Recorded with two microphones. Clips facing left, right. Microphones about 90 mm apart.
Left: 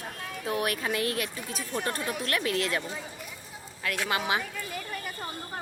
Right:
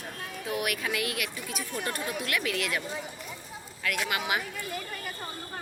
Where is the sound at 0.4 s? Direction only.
35° left (ahead or behind).